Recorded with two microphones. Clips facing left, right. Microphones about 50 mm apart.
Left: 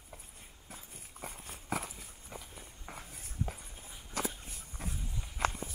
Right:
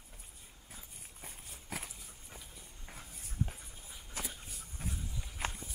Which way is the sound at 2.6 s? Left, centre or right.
Left.